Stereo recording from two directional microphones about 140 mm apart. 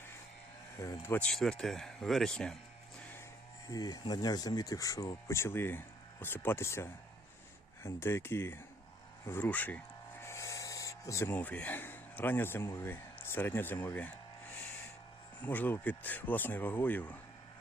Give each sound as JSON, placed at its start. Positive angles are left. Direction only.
{"t": 0.8, "sound": "speech", "side_deg": 20}
{"t": 1.3, "sound": "speech", "side_deg": 5}
{"t": 3.7, "sound": "speech", "side_deg": 25}
{"t": 15.4, "sound": "speech", "side_deg": 10}